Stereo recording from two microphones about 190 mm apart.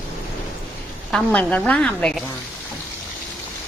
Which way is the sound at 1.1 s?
5° left (ahead or behind).